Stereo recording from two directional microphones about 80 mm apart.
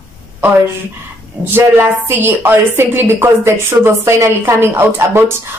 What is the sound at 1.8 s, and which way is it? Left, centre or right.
A woman's voice, right.